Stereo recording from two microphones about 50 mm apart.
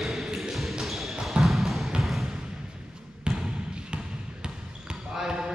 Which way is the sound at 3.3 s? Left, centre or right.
Centre.